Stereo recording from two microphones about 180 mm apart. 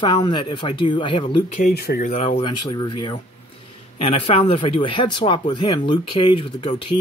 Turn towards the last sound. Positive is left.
turn(degrees=30)  # may be behind; listen again after turning